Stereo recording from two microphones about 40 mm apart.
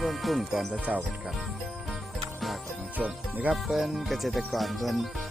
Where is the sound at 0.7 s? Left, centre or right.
Right.